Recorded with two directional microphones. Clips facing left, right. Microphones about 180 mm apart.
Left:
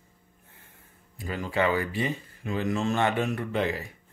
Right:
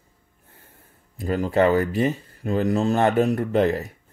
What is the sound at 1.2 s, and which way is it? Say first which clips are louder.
Speech: right 8 dB; 45° right (ahead or behind).